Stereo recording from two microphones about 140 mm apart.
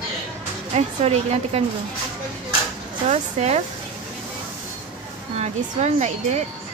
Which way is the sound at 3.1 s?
50° right (ahead or behind).